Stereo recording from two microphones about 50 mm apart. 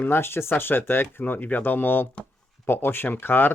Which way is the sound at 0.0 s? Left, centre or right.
Left.